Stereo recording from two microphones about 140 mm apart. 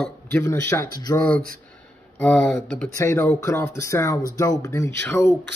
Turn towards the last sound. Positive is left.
turn(degrees=15)  # may be behind; listen again after turning